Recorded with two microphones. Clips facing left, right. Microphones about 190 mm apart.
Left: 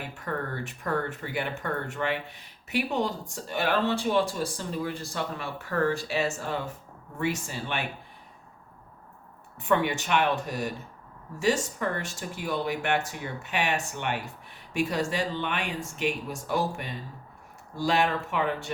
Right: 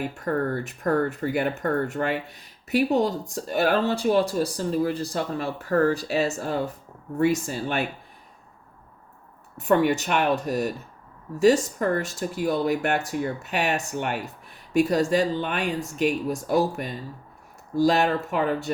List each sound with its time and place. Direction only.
0.3 s speech: 40° right (ahead or behind)
9.6 s speech: 40° right (ahead or behind)